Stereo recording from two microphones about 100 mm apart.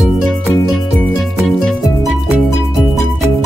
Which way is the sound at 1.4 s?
Centre (ahead or behind).